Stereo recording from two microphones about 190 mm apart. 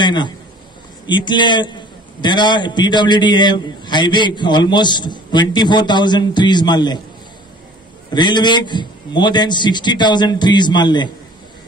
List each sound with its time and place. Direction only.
0.0 s a man's voice: 25° left (ahead or behind)
8.1 s a man's voice: 25° left (ahead or behind)